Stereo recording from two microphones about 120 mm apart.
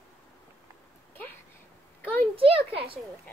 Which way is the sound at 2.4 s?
50° right (ahead or behind).